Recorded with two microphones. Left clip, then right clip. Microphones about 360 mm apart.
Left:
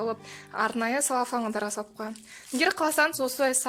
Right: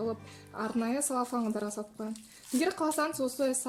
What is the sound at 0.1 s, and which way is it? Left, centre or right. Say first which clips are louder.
Speech: left 5 dB; left.